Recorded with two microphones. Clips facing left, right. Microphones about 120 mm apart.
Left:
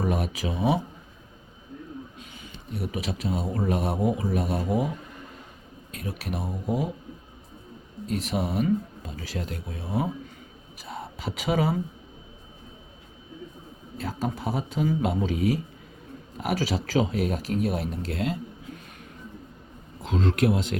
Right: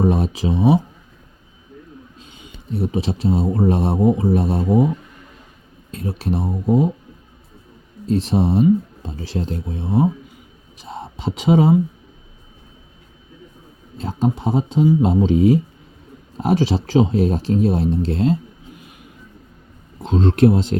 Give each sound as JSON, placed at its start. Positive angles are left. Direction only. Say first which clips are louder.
{"t": 0.0, "sound": "speech", "louder": "right 9 dB", "side_deg": -25}
{"t": 2.1, "sound": "speech", "louder": "right 1 dB", "side_deg": -25}
{"t": 5.9, "sound": "speech", "louder": "right 9 dB", "side_deg": -30}
{"t": 8.0, "sound": "speech", "louder": "right 10 dB", "side_deg": -30}
{"t": 14.0, "sound": "speech", "louder": "right 9 dB", "side_deg": -25}
{"t": 20.0, "sound": "speech", "louder": "right 9 dB", "side_deg": -25}